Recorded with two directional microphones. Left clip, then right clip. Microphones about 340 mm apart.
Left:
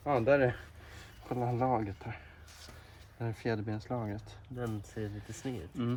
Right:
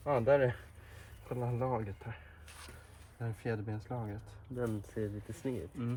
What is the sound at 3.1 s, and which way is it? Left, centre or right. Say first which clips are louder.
Speech: left 4 dB; centre.